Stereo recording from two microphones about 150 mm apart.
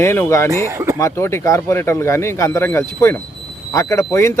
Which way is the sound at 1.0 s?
20° left (ahead or behind).